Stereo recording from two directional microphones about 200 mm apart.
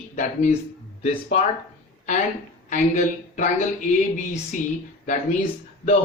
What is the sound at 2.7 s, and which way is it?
Speech, 40° left (ahead or behind).